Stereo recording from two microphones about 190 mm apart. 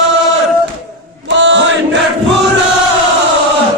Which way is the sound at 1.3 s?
70° right (ahead or behind).